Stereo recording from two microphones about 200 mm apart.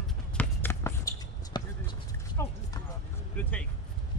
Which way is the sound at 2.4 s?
15° left (ahead or behind).